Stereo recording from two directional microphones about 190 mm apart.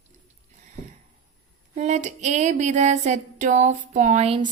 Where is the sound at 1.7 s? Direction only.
40° right (ahead or behind).